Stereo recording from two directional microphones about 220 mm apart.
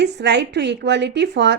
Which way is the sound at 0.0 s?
50° right (ahead or behind).